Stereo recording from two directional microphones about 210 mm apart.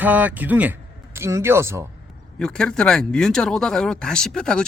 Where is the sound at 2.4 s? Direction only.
5° left (ahead or behind).